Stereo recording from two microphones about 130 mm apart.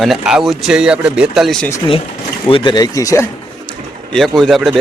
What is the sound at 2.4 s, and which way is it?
Speech, 40° left (ahead or behind).